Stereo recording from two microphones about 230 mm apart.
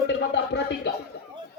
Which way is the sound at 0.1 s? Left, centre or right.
Left.